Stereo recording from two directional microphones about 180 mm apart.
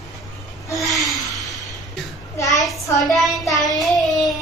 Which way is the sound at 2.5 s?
Centre (ahead or behind).